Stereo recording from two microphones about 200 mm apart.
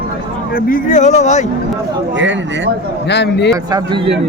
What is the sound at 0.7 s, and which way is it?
Speech, 40° left (ahead or behind).